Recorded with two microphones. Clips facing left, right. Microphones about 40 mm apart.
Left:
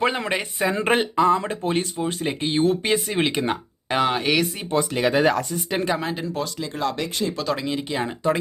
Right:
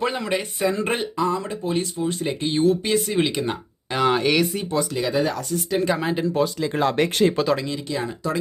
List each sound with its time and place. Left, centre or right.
0.0 s speech: left
4.0 s speech: centre
4.7 s speech: left
5.9 s speech: centre
6.7 s speech: right
7.0 s speech: right
7.5 s speech: centre
7.9 s speech: left